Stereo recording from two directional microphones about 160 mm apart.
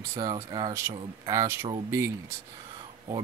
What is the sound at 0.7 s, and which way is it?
Speech, 20° right (ahead or behind).